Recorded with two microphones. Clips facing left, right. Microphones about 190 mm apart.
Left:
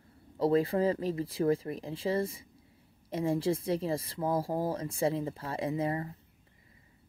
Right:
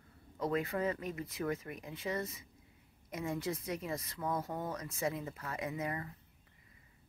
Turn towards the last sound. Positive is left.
turn(degrees=30)  # may be behind; listen again after turning